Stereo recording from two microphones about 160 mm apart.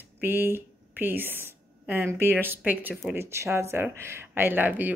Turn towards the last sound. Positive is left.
turn(degrees=-10)  # may be behind; listen again after turning